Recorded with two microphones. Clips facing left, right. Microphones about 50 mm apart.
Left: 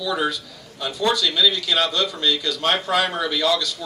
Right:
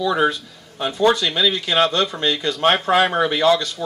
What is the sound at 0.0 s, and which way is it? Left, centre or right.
Speech, right.